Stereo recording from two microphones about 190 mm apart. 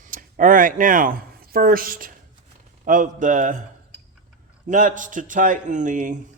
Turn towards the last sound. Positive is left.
turn(degrees=-40)  # may be behind; listen again after turning